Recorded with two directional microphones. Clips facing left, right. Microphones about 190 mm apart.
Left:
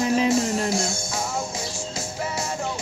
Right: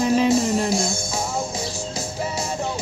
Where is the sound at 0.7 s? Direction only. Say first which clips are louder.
Right 2 dB; 15° right (ahead or behind).